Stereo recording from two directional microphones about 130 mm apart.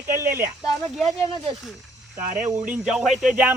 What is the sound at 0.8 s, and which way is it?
Speech, centre (ahead or behind).